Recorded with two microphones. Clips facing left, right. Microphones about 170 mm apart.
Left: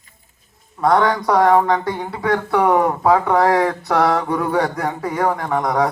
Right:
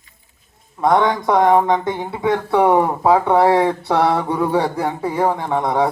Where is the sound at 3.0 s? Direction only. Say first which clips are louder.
Right 2 dB; 25° right (ahead or behind).